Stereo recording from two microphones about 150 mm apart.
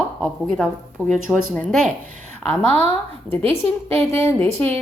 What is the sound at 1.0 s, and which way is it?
Speech, 15° right (ahead or behind).